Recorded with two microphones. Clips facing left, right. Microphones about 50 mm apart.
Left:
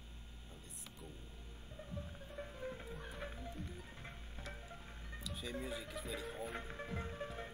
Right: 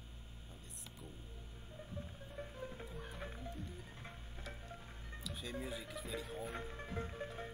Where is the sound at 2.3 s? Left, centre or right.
Centre.